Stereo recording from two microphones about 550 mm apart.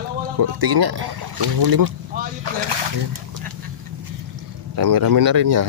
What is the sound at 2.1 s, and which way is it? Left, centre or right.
Speech, centre.